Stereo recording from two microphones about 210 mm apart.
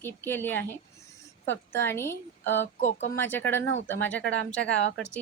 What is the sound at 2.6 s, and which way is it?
Speech, 35° left (ahead or behind).